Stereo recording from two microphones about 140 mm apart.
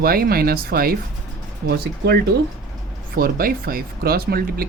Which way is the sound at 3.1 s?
90° right.